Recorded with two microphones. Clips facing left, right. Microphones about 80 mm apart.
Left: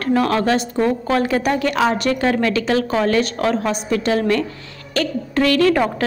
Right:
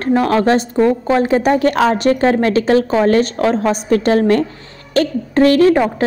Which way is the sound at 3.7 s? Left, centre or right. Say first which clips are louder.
Right 5 dB; right.